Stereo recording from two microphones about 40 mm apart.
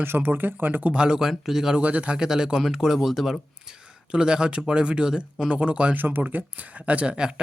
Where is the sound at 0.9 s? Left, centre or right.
Right.